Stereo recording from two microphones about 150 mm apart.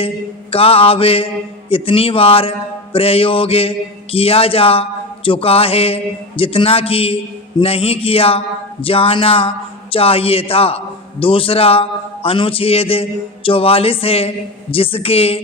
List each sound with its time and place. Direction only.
0.5 s speech: 40° left (ahead or behind)